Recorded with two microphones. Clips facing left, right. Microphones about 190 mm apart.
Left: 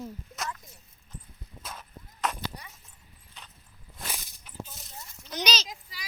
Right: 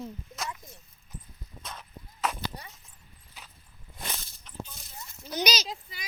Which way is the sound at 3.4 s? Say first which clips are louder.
Even; 5° right (ahead or behind).